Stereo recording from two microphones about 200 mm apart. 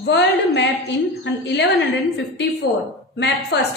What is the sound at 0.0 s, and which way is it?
A woman's voice, 60° left (ahead or behind).